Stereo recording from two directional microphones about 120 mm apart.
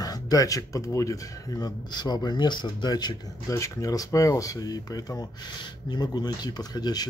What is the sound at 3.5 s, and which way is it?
Speech, 25° left (ahead or behind).